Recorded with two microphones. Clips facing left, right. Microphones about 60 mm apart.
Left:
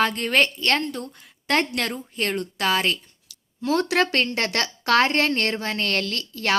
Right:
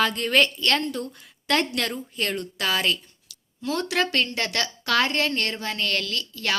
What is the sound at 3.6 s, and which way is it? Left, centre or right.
Speech, left.